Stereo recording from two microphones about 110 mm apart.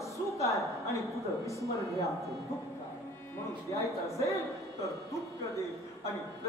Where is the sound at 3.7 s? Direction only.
30° left (ahead or behind).